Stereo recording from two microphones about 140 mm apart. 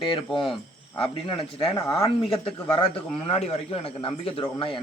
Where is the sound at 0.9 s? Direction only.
40° left (ahead or behind).